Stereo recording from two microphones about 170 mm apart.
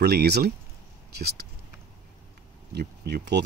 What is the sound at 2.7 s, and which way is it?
Speech, 70° right (ahead or behind).